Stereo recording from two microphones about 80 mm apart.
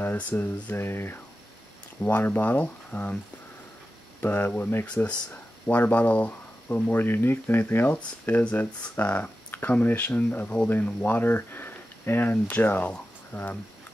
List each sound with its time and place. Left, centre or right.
0.0 s speech: left
4.2 s speech: left